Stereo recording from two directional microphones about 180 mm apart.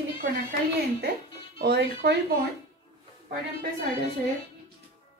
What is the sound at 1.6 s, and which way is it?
Speech, 65° right (ahead or behind).